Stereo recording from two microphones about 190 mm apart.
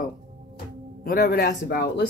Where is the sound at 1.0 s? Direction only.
50° left (ahead or behind).